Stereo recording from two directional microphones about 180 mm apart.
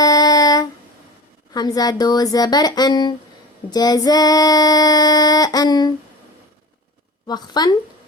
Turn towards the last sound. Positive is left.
turn(degrees=20)  # may be behind; listen again after turning